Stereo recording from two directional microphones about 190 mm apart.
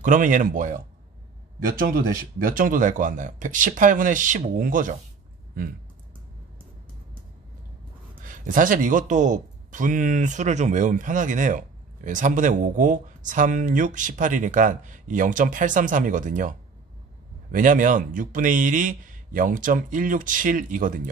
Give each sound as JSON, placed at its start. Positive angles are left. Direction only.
{"t": 0.0, "sound": "a man's voice", "side_deg": -45}
{"t": 8.2, "sound": "a man's voice", "side_deg": -45}